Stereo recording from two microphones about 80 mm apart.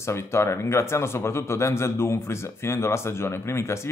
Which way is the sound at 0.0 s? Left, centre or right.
Left.